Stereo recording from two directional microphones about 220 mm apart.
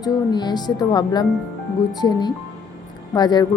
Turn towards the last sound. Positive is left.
turn(degrees=20)  # may be behind; listen again after turning